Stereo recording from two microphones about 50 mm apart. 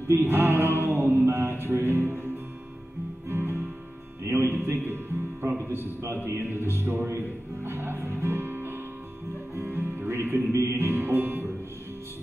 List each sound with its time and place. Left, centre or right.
0.1 s music: right
4.2 s music: right
4.5 s music: right
5.7 s a man's voice: right
9.6 s music: right
10.5 s music: right